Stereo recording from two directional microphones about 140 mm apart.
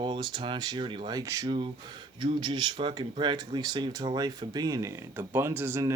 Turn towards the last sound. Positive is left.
turn(degrees=-20)  # may be behind; listen again after turning